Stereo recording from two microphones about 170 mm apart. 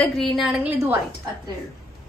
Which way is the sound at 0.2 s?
5° right (ahead or behind).